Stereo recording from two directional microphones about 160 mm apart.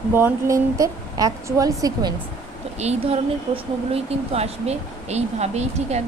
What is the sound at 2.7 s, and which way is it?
Speech, 40° right (ahead or behind).